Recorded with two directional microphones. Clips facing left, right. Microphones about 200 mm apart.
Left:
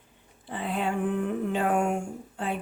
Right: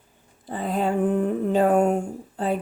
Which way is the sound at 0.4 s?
40° right (ahead or behind).